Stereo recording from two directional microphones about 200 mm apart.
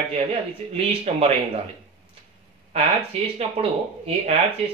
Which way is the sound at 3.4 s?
30° right (ahead or behind).